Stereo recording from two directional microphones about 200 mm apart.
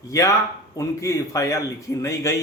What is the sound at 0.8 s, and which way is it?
Speech, 15° left (ahead or behind).